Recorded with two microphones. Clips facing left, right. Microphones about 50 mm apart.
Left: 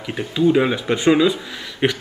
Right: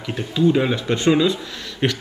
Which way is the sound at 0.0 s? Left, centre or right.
Centre.